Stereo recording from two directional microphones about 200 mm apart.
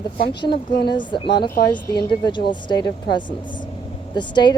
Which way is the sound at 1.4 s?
50° left (ahead or behind).